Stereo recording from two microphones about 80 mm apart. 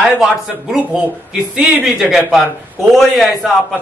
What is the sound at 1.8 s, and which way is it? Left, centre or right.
A man's voice, centre.